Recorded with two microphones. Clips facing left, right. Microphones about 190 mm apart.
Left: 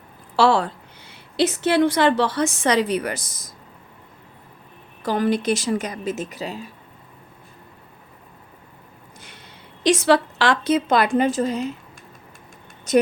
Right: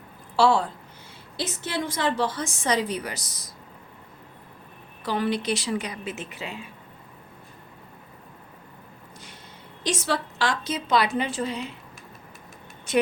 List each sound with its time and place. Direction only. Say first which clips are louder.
0.3 s a woman's voice: left 3 dB; 70° left (ahead or behind); by 3.5 s 50° left (ahead or behind)
5.0 s speech: left 5 dB; 45° left (ahead or behind)
9.8 s a woman's voice: left 10 dB; 70° left (ahead or behind); by 11.7 s 45° left (ahead or behind)
12.9 s speech: left 5 dB; 40° left (ahead or behind)